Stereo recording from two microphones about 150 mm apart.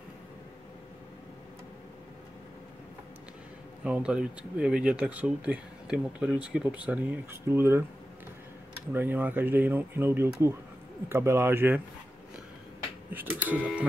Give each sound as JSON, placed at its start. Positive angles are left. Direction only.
{"t": 3.8, "sound": "speech", "side_deg": -5}
{"t": 8.9, "sound": "speech", "side_deg": -15}
{"t": 13.1, "sound": "speech", "side_deg": -10}